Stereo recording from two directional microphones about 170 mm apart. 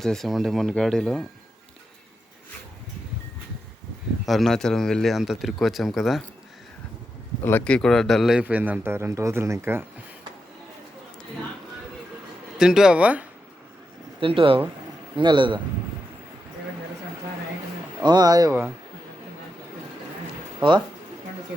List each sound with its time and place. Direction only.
0.0 s speech: centre (ahead or behind)
4.3 s speech: centre (ahead or behind)
7.4 s speech: 10° left (ahead or behind); by 9.8 s 15° right (ahead or behind)
12.5 s speech: 5° right (ahead or behind)
14.2 s speech: 30° right (ahead or behind)
18.0 s speech: 25° right (ahead or behind)
20.6 s speech: 30° right (ahead or behind)